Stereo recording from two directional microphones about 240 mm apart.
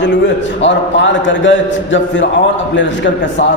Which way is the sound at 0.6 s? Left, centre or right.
Left.